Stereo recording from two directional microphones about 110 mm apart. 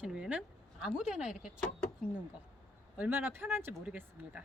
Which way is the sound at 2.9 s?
15° right (ahead or behind).